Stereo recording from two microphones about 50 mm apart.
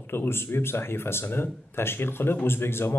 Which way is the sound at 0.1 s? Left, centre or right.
Left.